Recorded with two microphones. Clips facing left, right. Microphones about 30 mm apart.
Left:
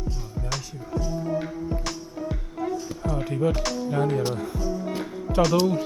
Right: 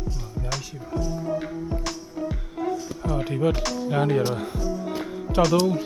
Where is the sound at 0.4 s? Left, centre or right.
Centre.